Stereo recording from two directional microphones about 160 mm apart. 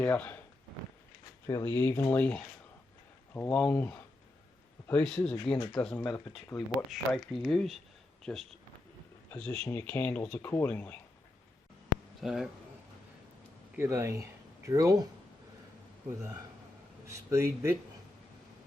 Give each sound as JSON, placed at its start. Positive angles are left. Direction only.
{"t": 0.0, "sound": "speech", "side_deg": 10}
{"t": 1.5, "sound": "speech", "side_deg": 20}
{"t": 6.0, "sound": "speech", "side_deg": 20}
{"t": 6.5, "sound": "speech", "side_deg": 0}
{"t": 12.2, "sound": "speech", "side_deg": 0}
{"t": 13.7, "sound": "speech", "side_deg": -15}
{"t": 17.1, "sound": "a man's voice", "side_deg": -15}